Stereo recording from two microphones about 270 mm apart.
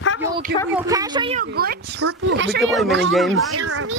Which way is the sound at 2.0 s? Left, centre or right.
Right.